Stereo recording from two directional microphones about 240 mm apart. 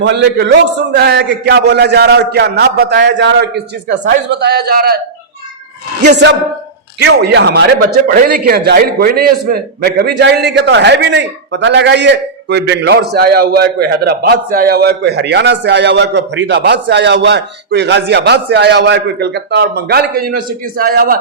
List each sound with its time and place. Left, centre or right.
0.0 s a man's voice: right
6.1 s a man's voice: right